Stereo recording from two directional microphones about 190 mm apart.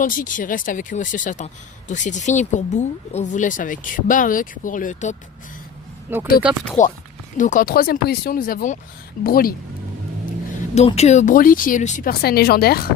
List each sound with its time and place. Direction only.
0.0 s speech: 45° left (ahead or behind)
6.1 s speech: 10° right (ahead or behind)
6.8 s speech: 40° left (ahead or behind)
10.8 s speech: 35° left (ahead or behind); by 12.9 s 55° left (ahead or behind)